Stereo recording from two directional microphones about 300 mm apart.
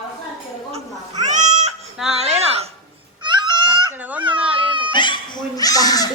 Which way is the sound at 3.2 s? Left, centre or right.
Centre.